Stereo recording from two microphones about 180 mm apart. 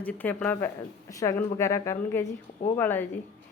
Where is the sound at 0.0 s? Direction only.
10° left (ahead or behind).